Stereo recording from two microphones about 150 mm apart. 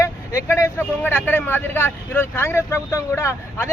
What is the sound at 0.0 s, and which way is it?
Speech, 20° left (ahead or behind).